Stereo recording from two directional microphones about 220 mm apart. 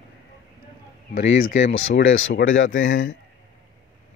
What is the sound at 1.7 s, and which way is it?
Speech, 60° left (ahead or behind).